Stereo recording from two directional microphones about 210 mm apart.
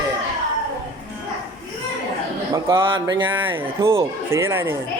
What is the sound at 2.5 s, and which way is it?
Speech, 20° right (ahead or behind).